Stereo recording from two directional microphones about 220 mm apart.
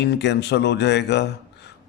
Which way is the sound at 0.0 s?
50° left (ahead or behind).